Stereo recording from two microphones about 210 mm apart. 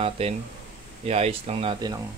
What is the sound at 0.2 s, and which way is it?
Speech, 30° right (ahead or behind).